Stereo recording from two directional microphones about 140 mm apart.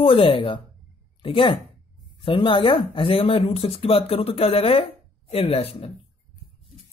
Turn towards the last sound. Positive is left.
turn(degrees=45)  # may be behind; listen again after turning